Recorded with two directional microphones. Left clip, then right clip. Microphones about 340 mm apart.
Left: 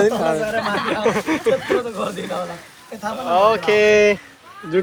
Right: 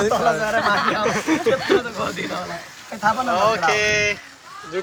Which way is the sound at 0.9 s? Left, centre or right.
Centre.